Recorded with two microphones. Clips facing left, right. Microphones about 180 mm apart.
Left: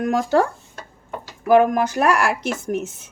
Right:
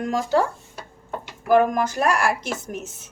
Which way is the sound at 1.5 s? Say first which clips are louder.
Left 3 dB; 55° left (ahead or behind).